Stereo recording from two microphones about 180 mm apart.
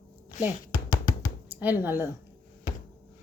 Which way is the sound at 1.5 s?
10° right (ahead or behind).